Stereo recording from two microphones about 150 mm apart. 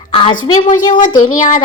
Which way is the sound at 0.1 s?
35° left (ahead or behind).